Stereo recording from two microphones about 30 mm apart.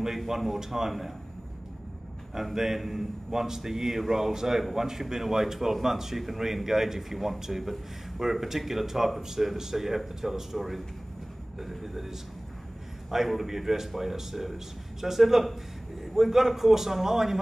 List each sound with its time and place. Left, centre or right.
0.3 s speech: centre
2.3 s speech: centre
11.8 s speech: centre